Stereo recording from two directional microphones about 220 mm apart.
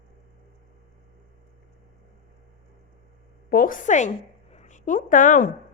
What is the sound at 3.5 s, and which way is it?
A woman's voice, 40° left (ahead or behind).